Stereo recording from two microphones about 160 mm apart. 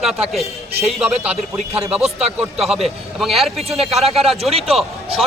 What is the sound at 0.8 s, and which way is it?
A man's voice, 5° right (ahead or behind).